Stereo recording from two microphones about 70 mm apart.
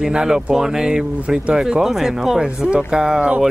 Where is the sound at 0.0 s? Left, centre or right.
Centre.